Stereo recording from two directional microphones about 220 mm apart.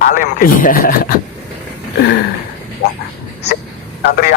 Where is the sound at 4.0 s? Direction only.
45° left (ahead or behind).